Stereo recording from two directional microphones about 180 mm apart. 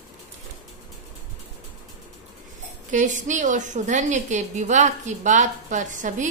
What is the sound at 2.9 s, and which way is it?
A woman's voice, 45° right (ahead or behind).